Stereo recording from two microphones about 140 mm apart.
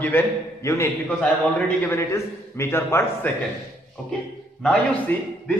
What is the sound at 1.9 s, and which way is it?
A man's voice, 20° left (ahead or behind).